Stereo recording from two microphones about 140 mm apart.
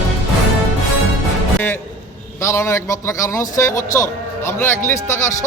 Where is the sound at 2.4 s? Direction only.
20° left (ahead or behind).